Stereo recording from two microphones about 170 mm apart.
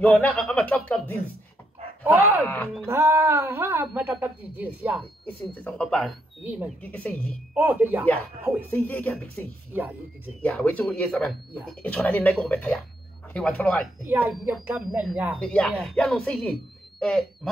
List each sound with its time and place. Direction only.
0.0 s speech: 5° left (ahead or behind)
2.4 s speech: 10° left (ahead or behind)
2.9 s speech: 15° right (ahead or behind)
5.6 s speech: 5° left (ahead or behind)
6.4 s speech: 10° right (ahead or behind)
6.8 s speech: 5° left (ahead or behind)
7.5 s speech: 10° right (ahead or behind)
8.7 s speech: 10° left (ahead or behind)
9.8 s speech: 10° right (ahead or behind)
10.4 s speech: 10° left (ahead or behind)
14.0 s speech: 10° right (ahead or behind)
15.3 s speech: 5° left (ahead or behind)